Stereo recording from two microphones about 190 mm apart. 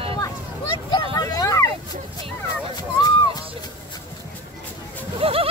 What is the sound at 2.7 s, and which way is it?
Speech, 20° left (ahead or behind).